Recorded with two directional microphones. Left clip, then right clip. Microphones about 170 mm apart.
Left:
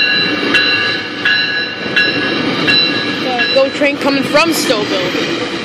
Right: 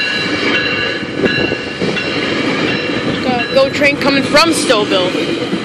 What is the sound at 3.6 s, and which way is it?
Speech, 20° left (ahead or behind).